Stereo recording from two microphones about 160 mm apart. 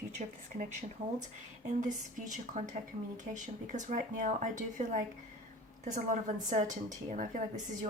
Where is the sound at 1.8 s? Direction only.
50° right (ahead or behind).